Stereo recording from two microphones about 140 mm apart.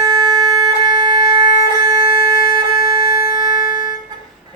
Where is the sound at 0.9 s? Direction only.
35° right (ahead or behind).